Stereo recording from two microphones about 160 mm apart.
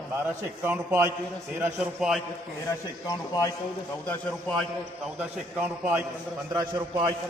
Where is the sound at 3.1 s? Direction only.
25° left (ahead or behind).